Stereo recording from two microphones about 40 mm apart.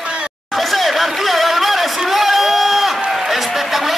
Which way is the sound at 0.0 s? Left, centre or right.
Right.